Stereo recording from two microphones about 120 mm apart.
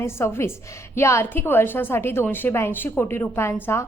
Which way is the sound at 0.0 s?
20° left (ahead or behind).